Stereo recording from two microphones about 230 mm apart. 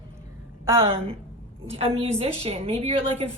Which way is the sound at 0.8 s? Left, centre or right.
Right.